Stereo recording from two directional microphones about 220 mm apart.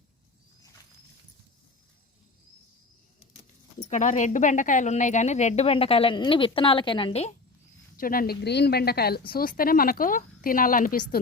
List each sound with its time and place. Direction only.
3.8 s a woman's voice: 35° left (ahead or behind)
7.9 s a woman's voice: 40° left (ahead or behind)